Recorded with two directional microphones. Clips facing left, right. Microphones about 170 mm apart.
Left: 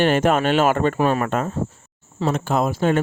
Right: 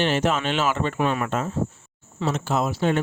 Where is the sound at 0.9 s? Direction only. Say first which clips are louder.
Left 4 dB; 40° left (ahead or behind).